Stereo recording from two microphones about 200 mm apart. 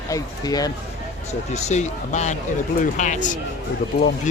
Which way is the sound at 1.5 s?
35° left (ahead or behind).